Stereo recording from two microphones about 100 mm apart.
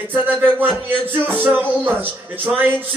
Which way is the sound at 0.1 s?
20° right (ahead or behind).